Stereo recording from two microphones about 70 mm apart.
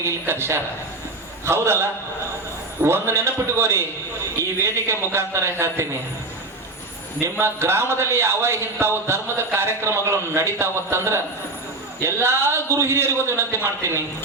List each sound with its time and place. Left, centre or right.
0.0 s a man's voice: right
2.8 s a man's voice: right
7.2 s a man's voice: right